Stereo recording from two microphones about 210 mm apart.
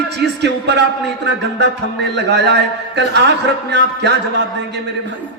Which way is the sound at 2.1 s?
55° right (ahead or behind).